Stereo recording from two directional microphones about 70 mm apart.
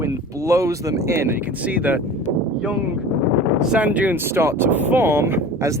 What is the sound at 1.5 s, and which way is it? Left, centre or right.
Speech, centre.